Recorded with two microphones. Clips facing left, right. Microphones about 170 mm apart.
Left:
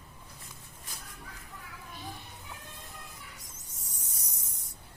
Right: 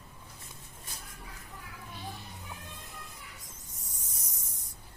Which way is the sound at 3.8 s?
70° left (ahead or behind).